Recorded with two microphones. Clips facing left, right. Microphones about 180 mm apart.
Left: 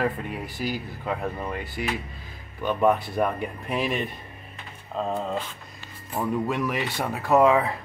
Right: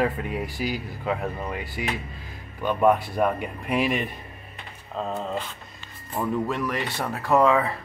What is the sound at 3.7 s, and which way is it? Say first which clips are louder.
Speech: right 3 dB; 15° right (ahead or behind).